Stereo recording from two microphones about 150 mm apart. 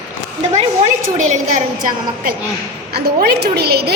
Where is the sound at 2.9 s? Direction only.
90° right.